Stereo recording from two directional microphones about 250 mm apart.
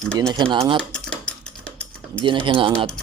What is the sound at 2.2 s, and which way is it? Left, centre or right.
Speech, centre.